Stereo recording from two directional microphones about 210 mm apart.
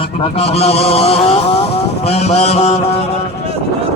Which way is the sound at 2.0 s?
30° left (ahead or behind).